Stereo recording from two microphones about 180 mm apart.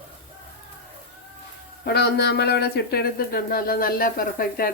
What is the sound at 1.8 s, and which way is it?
Speech, 65° left (ahead or behind).